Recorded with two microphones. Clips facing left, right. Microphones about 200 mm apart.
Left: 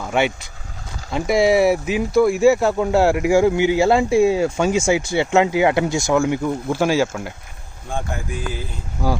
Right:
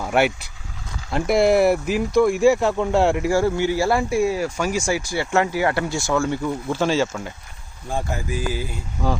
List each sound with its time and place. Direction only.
0.1 s speech: 5° right (ahead or behind)
3.3 s speech: 15° left (ahead or behind)
7.9 s speech: 5° right (ahead or behind)
9.0 s speech: 10° left (ahead or behind)